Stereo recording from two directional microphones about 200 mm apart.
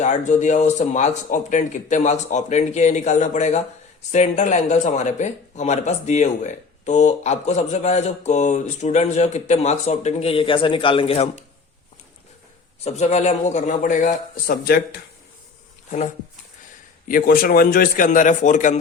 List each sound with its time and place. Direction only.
0.0 s speech: 35° left (ahead or behind)
12.8 s speech: 35° left (ahead or behind)
17.1 s a man's voice: 45° left (ahead or behind)